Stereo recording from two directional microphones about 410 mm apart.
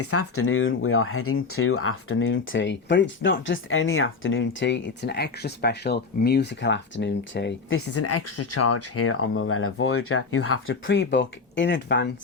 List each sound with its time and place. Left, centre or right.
0.0 s speech: left